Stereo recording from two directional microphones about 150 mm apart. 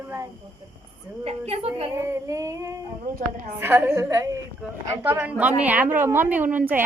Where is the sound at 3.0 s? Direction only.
65° right (ahead or behind).